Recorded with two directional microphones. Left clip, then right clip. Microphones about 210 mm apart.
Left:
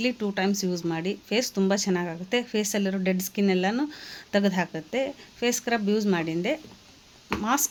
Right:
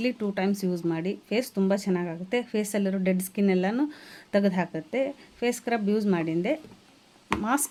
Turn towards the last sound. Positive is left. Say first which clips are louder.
# left 1 dB
turn(degrees=-5)  # may be behind; listen again after turning